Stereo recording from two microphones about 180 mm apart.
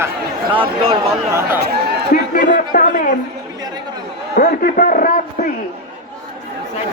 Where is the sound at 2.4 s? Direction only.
50° left (ahead or behind).